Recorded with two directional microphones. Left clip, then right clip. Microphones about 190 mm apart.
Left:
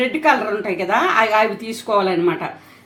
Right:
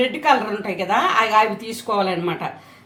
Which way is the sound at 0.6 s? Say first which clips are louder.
Left 2 dB; 25° left (ahead or behind).